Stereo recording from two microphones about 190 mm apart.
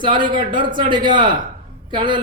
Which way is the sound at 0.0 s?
25° right (ahead or behind).